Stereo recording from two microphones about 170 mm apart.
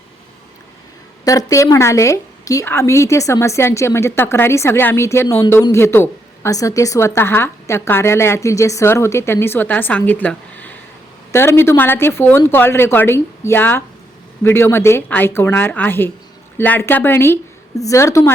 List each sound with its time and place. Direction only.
1.2 s a woman's voice: 20° left (ahead or behind)